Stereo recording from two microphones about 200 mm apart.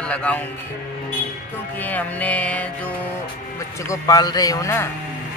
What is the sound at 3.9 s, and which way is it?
A man's voice, 20° left (ahead or behind).